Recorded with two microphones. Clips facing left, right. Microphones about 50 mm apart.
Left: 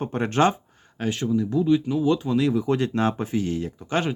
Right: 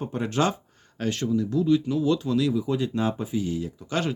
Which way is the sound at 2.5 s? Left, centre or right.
Left.